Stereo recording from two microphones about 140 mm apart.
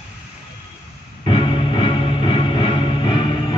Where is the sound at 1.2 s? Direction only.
40° left (ahead or behind).